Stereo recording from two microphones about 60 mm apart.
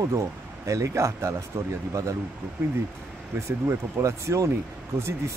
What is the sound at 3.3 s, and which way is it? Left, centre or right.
Speech, right.